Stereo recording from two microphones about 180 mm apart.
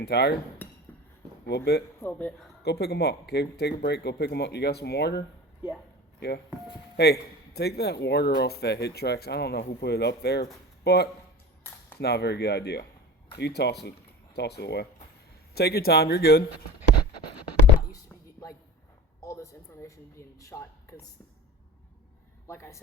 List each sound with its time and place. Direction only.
0.0 s speech: 65° left (ahead or behind)
1.5 s a man's voice: 65° left (ahead or behind)
2.0 s a man's voice: 10° left (ahead or behind)
2.6 s a man's voice: 65° left (ahead or behind)
17.9 s a sound: 15° left (ahead or behind)
19.2 s a man's voice: 15° left (ahead or behind)
22.4 s a man's voice: 15° left (ahead or behind)